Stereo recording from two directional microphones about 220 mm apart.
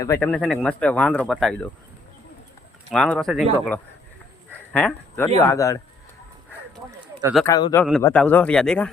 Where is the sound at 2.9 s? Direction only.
Centre (ahead or behind).